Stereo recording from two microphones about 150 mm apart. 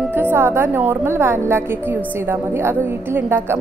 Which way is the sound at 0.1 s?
15° right (ahead or behind).